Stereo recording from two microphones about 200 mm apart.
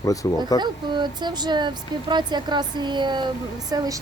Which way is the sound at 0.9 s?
20° right (ahead or behind).